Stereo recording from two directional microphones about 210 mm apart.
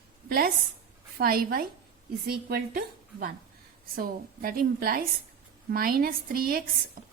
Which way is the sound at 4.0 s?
45° right (ahead or behind).